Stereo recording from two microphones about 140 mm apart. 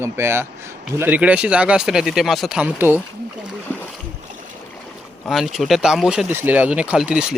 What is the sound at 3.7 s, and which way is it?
Boat, 10° left (ahead or behind).